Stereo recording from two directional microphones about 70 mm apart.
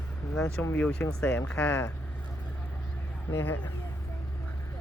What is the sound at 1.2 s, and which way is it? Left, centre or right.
Speech, left.